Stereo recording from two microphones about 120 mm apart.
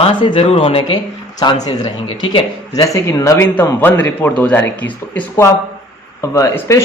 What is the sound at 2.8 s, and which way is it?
A man's voice, 25° left (ahead or behind).